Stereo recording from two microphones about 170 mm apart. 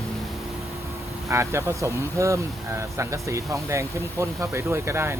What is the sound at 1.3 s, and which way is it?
Speech, 15° right (ahead or behind).